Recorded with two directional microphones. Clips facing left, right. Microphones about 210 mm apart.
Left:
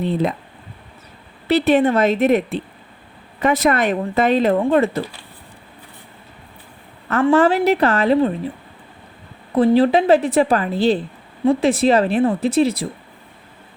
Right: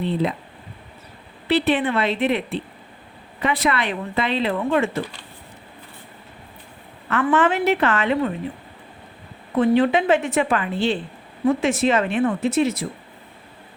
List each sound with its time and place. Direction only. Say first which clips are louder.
0.0 s speech: left 3 dB; 45° left (ahead or behind)
1.5 s a woman's voice: left 5 dB; 45° left (ahead or behind)
7.3 s a woman's voice: left 3 dB; 35° left (ahead or behind)
9.6 s a woman's voice: left 3 dB; 35° left (ahead or behind)